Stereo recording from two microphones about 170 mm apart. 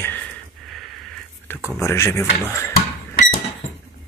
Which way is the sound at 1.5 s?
15° left (ahead or behind).